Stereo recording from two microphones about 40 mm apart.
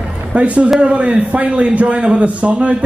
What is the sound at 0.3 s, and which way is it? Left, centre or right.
A man's voice, right.